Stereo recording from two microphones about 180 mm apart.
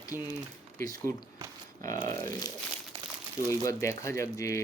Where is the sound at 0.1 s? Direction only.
10° right (ahead or behind).